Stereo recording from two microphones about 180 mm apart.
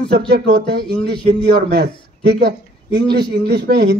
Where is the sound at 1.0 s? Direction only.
30° left (ahead or behind).